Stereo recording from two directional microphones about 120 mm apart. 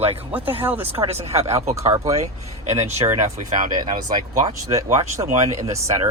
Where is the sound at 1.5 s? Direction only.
25° right (ahead or behind).